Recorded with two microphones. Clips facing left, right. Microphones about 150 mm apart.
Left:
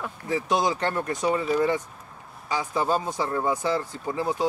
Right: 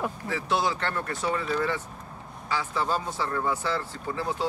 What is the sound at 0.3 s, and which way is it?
Speech, 15° left (ahead or behind).